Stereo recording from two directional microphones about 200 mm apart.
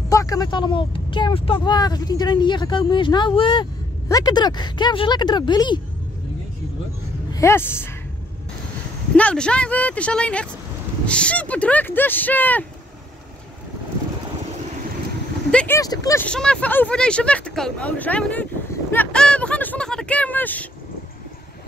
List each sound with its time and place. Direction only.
0.1 s speech: 15° left (ahead or behind)
7.3 s speech: 10° left (ahead or behind)
9.1 s speech: 5° left (ahead or behind)
15.5 s speech: 10° left (ahead or behind)
16.3 s speech: 5° left (ahead or behind)